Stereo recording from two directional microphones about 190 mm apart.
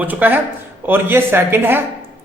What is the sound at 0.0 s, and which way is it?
A man's voice, 10° right (ahead or behind).